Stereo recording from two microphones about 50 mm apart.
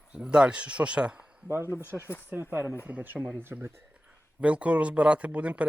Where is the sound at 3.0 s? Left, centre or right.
Right.